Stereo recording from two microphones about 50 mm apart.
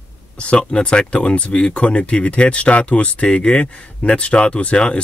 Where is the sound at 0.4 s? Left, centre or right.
Left.